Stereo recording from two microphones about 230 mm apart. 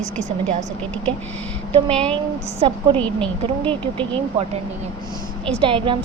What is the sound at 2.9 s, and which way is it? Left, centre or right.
Speech, centre.